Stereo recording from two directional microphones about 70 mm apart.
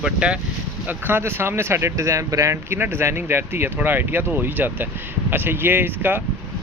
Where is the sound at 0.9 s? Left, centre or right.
Right.